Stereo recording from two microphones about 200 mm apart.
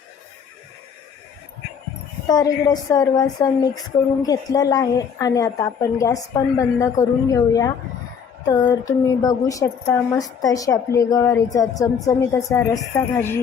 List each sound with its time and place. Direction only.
2.2 s a woman's voice: 20° left (ahead or behind)